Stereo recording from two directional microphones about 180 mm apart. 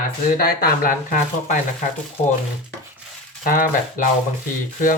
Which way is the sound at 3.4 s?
50° left (ahead or behind).